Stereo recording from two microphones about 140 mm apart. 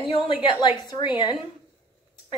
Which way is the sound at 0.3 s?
30° left (ahead or behind).